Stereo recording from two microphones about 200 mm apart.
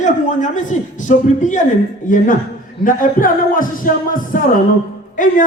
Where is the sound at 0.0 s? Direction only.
40° left (ahead or behind).